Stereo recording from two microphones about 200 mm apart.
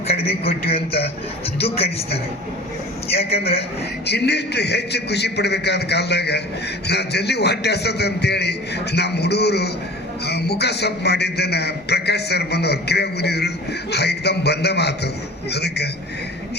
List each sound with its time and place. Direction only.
0.4 s a man's voice: 30° left (ahead or behind)
3.2 s a man's voice: 30° left (ahead or behind)
4.0 s a man's voice: 55° left (ahead or behind)